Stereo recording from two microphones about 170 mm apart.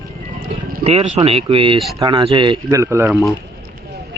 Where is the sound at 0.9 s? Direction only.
35° right (ahead or behind); by 3.1 s 15° right (ahead or behind).